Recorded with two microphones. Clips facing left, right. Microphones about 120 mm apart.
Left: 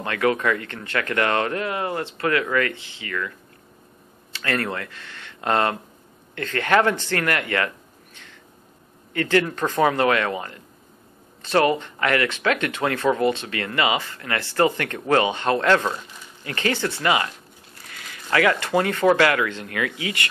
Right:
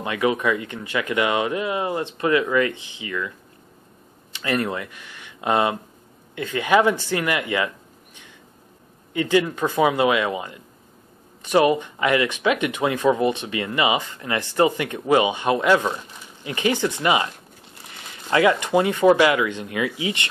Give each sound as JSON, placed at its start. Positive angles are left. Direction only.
{"t": 0.0, "sound": "speech", "side_deg": -15}